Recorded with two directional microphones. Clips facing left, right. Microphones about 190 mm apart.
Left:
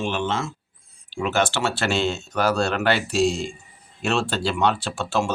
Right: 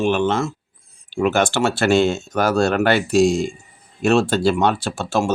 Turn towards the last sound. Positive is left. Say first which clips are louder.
# right 3 dB
turn(degrees=-45)  # may be behind; listen again after turning